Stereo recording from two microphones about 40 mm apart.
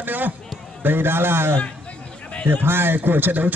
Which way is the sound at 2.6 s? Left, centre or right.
Right.